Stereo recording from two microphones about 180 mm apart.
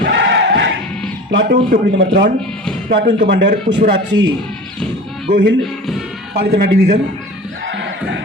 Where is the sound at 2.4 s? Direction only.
5° left (ahead or behind).